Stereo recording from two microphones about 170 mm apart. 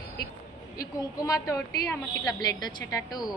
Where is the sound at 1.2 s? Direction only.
20° left (ahead or behind).